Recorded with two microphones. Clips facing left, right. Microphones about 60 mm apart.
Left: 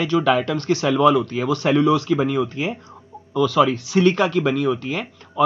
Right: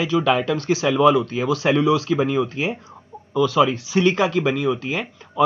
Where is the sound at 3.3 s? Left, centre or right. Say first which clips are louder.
Even; centre.